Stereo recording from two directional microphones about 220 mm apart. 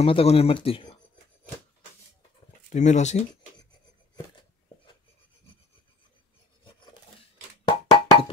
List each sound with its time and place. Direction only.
0.0 s speech: 25° left (ahead or behind)
2.7 s speech: 30° left (ahead or behind)
7.6 s plop: 20° left (ahead or behind)